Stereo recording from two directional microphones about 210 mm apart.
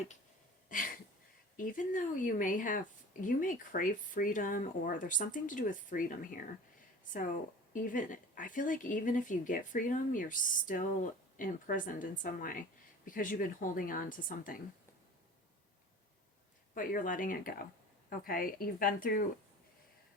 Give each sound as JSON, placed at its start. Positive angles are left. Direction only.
{"t": 0.7, "sound": "a sound", "side_deg": 40}
{"t": 1.5, "sound": "speech", "side_deg": 40}
{"t": 7.7, "sound": "speech", "side_deg": 40}
{"t": 16.7, "sound": "speech", "side_deg": 40}